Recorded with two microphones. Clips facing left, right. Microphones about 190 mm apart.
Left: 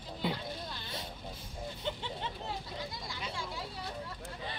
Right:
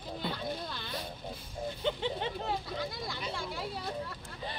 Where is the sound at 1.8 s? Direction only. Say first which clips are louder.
Right 7 dB; 65° right (ahead or behind).